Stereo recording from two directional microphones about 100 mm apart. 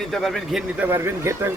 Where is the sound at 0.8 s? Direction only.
25° right (ahead or behind).